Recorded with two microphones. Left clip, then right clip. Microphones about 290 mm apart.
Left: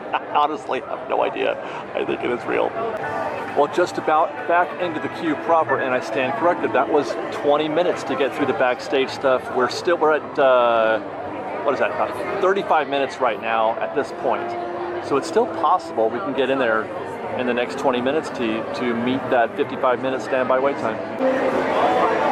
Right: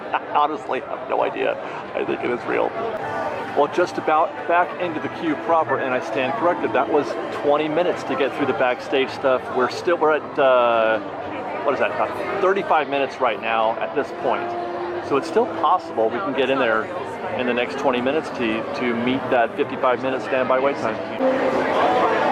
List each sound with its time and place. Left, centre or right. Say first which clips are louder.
0.1 s a man's voice: even; centre
15.4 s a man's voice: even; left
16.1 s speech: even; centre